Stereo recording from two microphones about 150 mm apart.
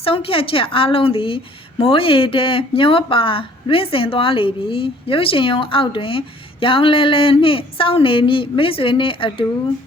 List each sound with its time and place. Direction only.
0.0 s speech: 40° left (ahead or behind)